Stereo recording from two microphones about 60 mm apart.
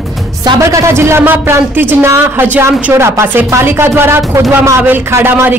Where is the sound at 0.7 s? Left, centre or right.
Right.